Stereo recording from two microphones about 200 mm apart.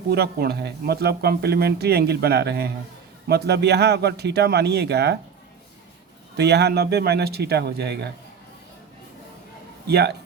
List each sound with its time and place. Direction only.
0.1 s a man's voice: 50° right (ahead or behind)
6.3 s a man's voice: 55° right (ahead or behind)
9.8 s a man's voice: 55° right (ahead or behind)